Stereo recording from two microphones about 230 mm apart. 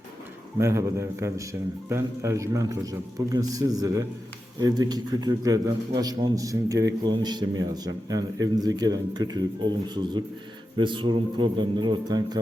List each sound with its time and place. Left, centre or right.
0.6 s a man's voice: centre